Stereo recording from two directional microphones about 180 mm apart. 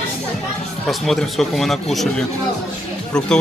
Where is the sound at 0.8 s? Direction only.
Centre (ahead or behind).